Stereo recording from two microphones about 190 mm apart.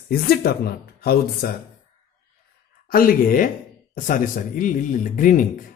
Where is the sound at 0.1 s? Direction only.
55° left (ahead or behind).